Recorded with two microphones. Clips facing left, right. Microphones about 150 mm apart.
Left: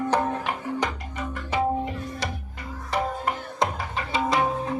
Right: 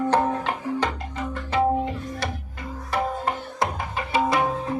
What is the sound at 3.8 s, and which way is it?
Music, 20° right (ahead or behind).